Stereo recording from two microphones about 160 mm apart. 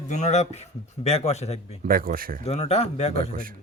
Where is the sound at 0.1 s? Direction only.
45° left (ahead or behind).